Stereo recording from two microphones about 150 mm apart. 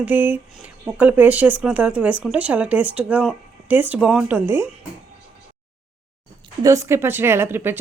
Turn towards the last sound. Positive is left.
turn(degrees=-15)  # may be behind; listen again after turning